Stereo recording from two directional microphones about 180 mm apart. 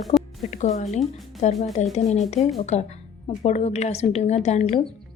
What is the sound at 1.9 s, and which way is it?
A woman's voice, 40° left (ahead or behind).